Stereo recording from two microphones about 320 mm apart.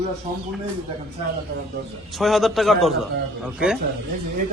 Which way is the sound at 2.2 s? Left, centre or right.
Centre.